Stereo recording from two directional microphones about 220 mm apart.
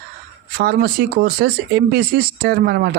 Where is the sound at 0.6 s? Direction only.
45° right (ahead or behind).